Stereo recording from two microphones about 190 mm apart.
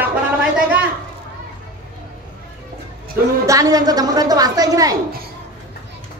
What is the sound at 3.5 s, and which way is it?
A woman's voice, 20° right (ahead or behind).